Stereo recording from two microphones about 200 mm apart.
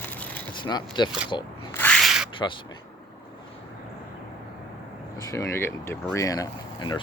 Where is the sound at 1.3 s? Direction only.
20° left (ahead or behind).